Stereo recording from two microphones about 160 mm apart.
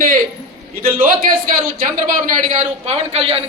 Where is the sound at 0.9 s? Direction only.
60° right (ahead or behind).